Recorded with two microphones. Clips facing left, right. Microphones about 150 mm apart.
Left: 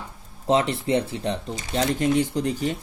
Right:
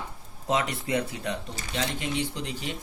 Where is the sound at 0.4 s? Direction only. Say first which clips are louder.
Left 6 dB; 30° left (ahead or behind).